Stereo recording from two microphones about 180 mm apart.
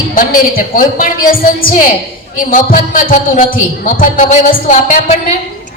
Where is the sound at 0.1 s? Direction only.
50° left (ahead or behind).